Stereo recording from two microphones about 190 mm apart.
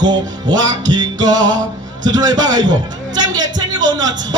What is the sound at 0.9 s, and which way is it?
A man's voice, 20° right (ahead or behind).